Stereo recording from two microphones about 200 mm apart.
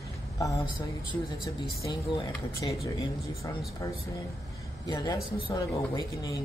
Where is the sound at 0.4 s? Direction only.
15° left (ahead or behind).